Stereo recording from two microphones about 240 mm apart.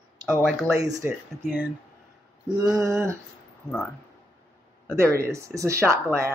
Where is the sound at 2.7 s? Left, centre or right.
Centre.